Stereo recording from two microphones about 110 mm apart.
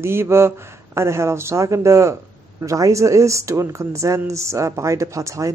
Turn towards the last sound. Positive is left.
turn(degrees=-30)  # may be behind; listen again after turning